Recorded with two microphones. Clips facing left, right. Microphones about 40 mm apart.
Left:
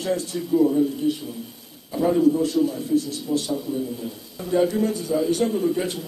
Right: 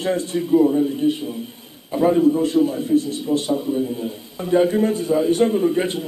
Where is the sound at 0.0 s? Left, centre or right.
Right.